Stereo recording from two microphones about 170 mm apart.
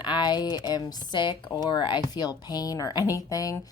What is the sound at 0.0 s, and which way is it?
Speech, 25° left (ahead or behind).